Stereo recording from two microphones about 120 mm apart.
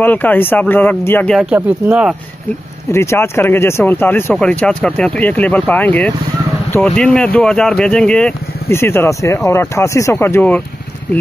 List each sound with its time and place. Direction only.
0.0 s speech: 15° left (ahead or behind)
1.3 s speech: 10° right (ahead or behind)
2.9 s speech: 20° left (ahead or behind)
8.6 s speech: 20° left (ahead or behind)